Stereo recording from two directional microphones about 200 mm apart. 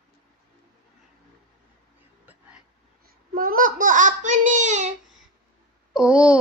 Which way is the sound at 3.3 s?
45° right (ahead or behind).